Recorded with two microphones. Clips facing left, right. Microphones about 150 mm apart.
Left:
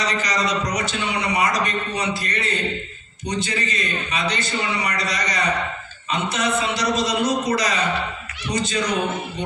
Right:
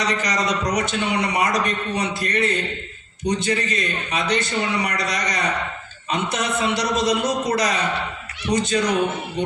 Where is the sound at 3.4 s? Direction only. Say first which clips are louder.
Right 3 dB; 50° right (ahead or behind).